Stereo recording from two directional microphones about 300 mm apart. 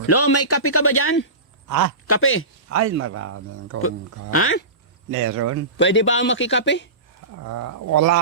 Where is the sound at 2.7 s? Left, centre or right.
Right.